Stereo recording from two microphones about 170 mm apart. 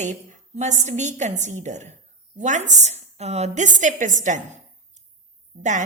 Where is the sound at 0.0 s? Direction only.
45° right (ahead or behind).